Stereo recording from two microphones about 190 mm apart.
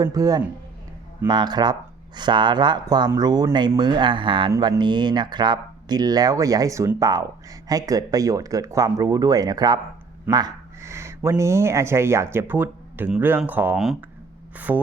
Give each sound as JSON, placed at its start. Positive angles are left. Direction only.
{"t": 0.0, "sound": "a man's voice", "side_deg": -20}
{"t": 14.5, "sound": "music", "side_deg": -10}